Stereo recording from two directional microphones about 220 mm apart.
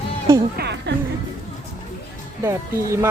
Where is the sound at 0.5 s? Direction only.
50° right (ahead or behind).